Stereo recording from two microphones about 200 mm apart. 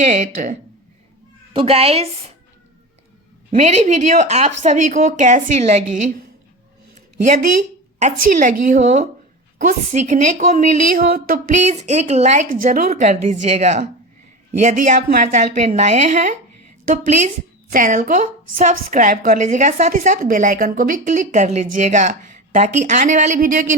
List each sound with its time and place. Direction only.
0.0 s a woman's voice: 40° right (ahead or behind)
1.5 s speech: 30° right (ahead or behind)
3.5 s a woman's voice: 35° right (ahead or behind)
7.2 s a woman's voice: 40° right (ahead or behind)